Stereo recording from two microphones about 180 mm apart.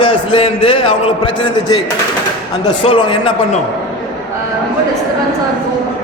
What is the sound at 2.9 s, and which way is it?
Speech, 30° left (ahead or behind).